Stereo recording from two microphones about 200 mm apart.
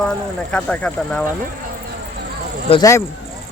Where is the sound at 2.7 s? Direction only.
15° left (ahead or behind).